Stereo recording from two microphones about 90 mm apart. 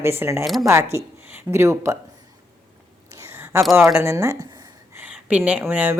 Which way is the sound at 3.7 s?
25° right (ahead or behind).